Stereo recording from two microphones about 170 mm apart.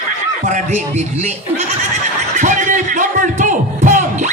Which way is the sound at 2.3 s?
50° right (ahead or behind).